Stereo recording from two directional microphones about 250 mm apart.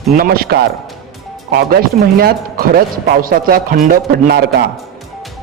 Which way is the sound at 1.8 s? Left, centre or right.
Right.